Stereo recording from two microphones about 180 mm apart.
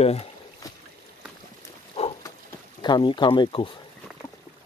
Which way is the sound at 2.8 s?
25° left (ahead or behind).